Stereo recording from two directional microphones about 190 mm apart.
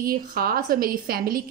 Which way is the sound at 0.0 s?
50° right (ahead or behind).